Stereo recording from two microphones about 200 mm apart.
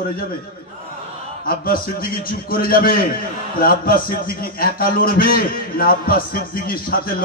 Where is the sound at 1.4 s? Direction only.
45° left (ahead or behind).